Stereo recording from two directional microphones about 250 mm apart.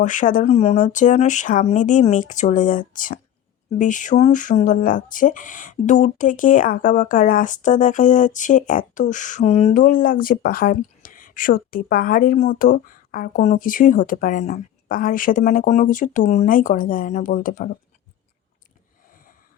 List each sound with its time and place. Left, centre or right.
0.0 s speech: left